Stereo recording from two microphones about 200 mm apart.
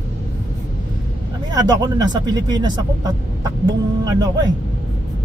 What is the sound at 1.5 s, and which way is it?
Speech, 20° right (ahead or behind).